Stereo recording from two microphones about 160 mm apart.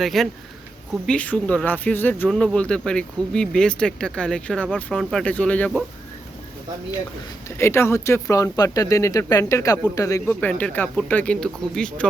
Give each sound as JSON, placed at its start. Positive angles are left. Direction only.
{"t": 0.0, "sound": "speech", "side_deg": 0}
{"t": 7.6, "sound": "speech", "side_deg": 15}